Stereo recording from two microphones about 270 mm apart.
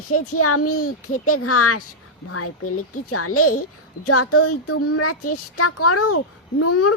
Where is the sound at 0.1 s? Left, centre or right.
Left.